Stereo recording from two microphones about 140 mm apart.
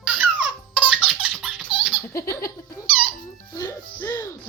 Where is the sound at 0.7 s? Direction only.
5° right (ahead or behind).